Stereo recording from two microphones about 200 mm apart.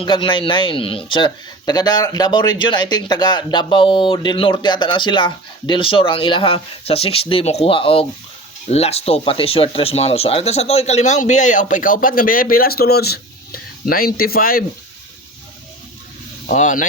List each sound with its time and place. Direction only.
0.0 s a man's voice: 25° left (ahead or behind); by 14.6 s 45° left (ahead or behind)
16.5 s speech: 40° left (ahead or behind)